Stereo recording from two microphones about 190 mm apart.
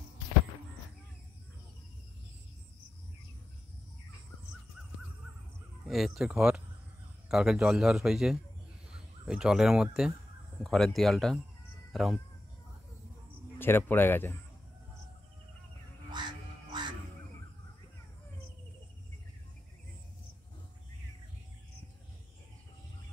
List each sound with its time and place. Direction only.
5.9 s a man's voice: centre (ahead or behind)
13.6 s speech: 10° left (ahead or behind)
16.1 s music: 25° right (ahead or behind)